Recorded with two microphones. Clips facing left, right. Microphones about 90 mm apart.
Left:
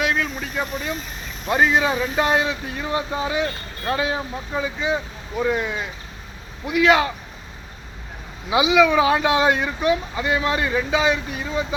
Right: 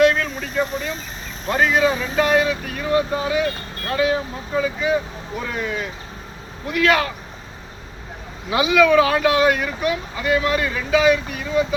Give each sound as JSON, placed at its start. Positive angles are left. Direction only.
{"t": 0.0, "sound": "a sound", "side_deg": 5}
{"t": 1.5, "sound": "speech", "side_deg": 15}
{"t": 8.4, "sound": "speech", "side_deg": 20}